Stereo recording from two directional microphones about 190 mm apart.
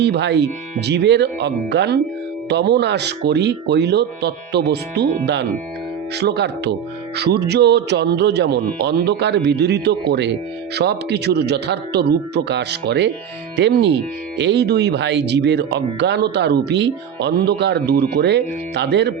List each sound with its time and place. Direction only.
0.0 s speech: 65° right (ahead or behind)